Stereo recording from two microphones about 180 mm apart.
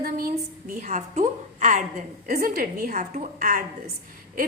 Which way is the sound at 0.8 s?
40° right (ahead or behind).